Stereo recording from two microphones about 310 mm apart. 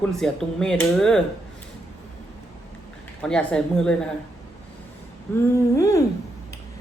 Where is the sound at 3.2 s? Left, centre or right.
Centre.